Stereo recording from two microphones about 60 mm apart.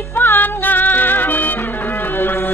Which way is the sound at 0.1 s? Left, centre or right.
Left.